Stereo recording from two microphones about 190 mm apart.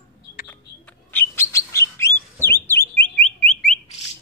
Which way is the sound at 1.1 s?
10° left (ahead or behind).